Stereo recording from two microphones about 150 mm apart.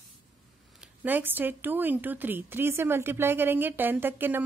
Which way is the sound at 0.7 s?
10° right (ahead or behind).